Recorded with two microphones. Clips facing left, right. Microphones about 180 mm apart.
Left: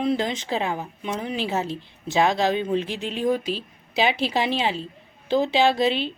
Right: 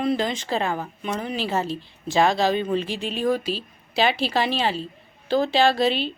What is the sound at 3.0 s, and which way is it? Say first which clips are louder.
A woman's voice: even; 20° left (ahead or behind).